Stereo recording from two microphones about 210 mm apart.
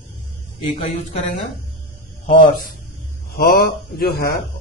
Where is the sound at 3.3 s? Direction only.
45° left (ahead or behind).